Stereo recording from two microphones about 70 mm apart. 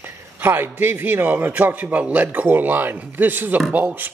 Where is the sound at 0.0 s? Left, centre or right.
Right.